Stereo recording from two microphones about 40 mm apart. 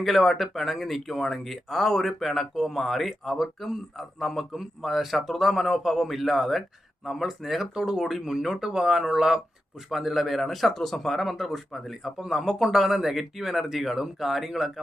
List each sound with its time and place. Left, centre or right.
0.0 s speech: centre
9.9 s speech: centre
11.3 s speech: centre